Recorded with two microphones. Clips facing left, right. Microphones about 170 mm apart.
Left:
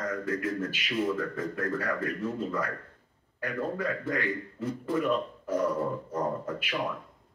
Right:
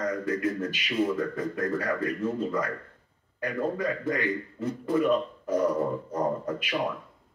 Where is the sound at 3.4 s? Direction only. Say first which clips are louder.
Right 3 dB; 15° right (ahead or behind).